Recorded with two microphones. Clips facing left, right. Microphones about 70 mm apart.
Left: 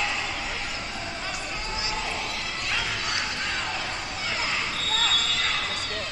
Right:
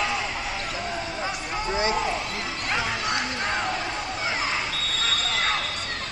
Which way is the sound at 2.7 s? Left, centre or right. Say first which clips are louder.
Right 4 dB; right.